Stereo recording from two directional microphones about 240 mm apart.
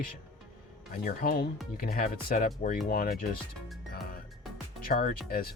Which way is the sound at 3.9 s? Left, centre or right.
Left.